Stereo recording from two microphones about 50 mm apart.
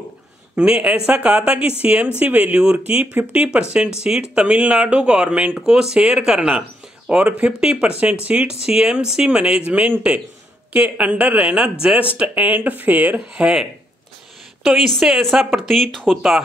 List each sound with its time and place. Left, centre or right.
0.6 s speech: centre
5.7 s speech: centre
7.1 s speech: right
7.9 s speech: right
8.5 s speech: centre; by 13.2 s right
13.3 s speech: centre
14.7 s a woman's voice: centre